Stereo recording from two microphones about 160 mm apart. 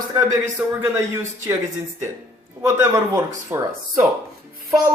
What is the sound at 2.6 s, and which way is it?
Speech, 15° right (ahead or behind).